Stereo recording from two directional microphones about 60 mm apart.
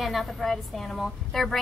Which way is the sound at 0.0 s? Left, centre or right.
Centre.